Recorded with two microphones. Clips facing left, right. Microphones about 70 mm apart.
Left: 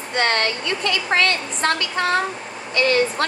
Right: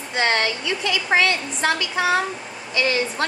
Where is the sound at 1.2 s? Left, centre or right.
Left.